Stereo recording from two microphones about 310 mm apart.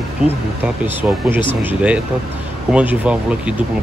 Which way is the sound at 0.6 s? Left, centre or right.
Centre.